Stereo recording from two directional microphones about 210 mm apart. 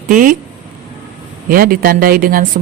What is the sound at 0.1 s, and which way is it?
Speech, 40° right (ahead or behind).